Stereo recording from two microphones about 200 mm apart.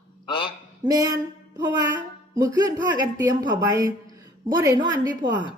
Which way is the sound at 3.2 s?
20° right (ahead or behind).